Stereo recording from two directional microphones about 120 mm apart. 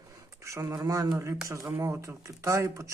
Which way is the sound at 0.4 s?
25° right (ahead or behind).